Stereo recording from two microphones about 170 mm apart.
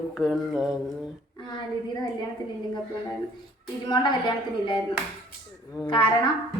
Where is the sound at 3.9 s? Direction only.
25° left (ahead or behind).